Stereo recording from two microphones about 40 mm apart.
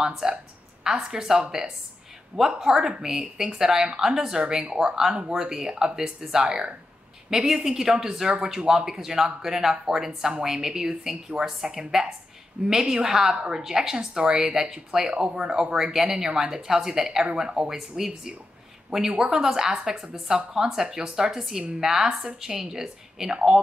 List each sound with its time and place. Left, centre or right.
0.0 s speech: centre